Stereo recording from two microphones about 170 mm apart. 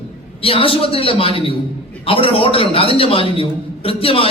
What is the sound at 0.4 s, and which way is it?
A man's voice, 35° left (ahead or behind).